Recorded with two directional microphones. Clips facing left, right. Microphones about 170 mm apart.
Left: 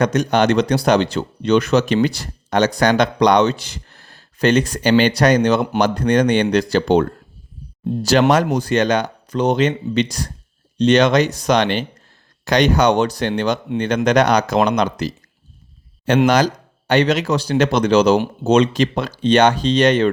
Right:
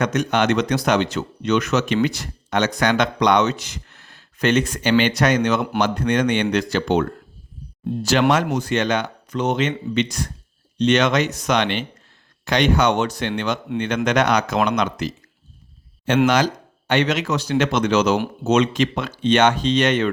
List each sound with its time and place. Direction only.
0.0 s speech: 35° left (ahead or behind)
8.5 s speech: 35° left (ahead or behind)